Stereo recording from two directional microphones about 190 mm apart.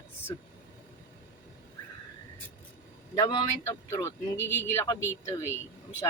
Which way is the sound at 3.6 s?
10° left (ahead or behind).